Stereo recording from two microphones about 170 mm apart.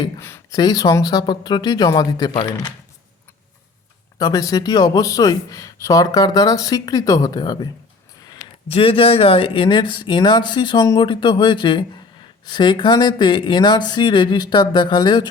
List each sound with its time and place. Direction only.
0.2 s speech: 15° left (ahead or behind)
4.2 s speech: 20° left (ahead or behind)
8.3 s a sound: 20° left (ahead or behind)
8.7 s speech: 35° left (ahead or behind)